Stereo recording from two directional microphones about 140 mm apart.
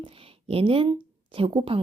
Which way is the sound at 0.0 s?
40° right (ahead or behind).